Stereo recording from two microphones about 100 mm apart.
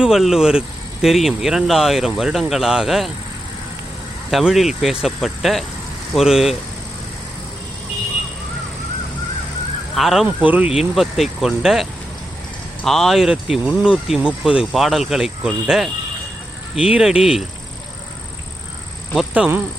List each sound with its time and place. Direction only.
0.0 s speech: 5° right (ahead or behind)
4.3 s speech: centre (ahead or behind)
9.9 s speech: centre (ahead or behind)
10.2 s speech: 15° right (ahead or behind)